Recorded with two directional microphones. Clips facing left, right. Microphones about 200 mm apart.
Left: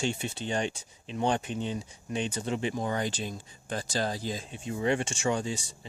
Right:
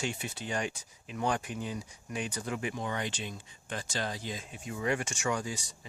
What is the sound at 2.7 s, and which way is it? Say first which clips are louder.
Speech: left 5 dB; 35° left (ahead or behind).